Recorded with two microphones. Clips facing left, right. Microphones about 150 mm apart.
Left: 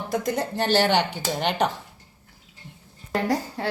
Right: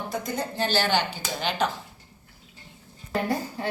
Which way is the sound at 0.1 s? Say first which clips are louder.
Left 7 dB; 90° left.